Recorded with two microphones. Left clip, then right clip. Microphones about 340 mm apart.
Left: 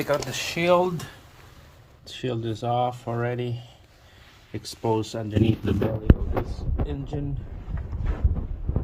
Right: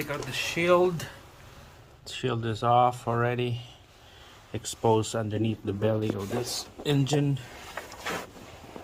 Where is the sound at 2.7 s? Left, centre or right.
Right.